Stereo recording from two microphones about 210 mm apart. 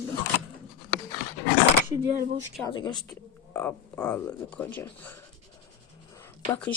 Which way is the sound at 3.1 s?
10° left (ahead or behind).